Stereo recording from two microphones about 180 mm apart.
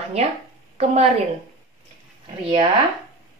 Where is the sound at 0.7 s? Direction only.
35° right (ahead or behind).